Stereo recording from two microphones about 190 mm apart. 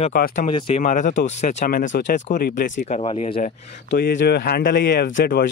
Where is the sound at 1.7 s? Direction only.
50° left (ahead or behind); by 3.5 s 30° left (ahead or behind).